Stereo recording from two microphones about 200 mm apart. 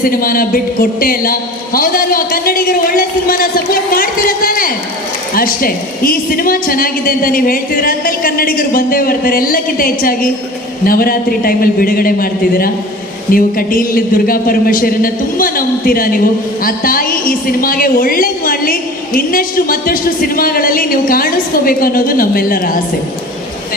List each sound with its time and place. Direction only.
0.0 s a woman's voice: 45° left (ahead or behind)